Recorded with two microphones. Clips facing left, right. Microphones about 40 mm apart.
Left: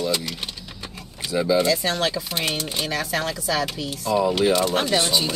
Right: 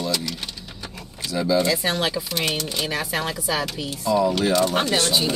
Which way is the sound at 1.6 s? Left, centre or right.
Centre.